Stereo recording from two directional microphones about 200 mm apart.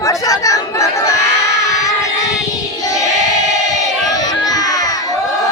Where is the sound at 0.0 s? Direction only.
15° left (ahead or behind).